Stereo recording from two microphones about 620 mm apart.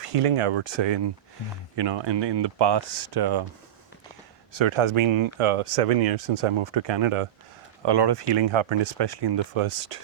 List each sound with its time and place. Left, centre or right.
0.0 s speech: right
4.5 s speech: right
9.4 s speech: right